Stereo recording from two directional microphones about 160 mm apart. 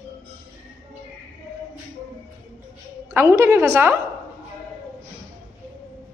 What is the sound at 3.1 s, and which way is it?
Speech, 15° right (ahead or behind).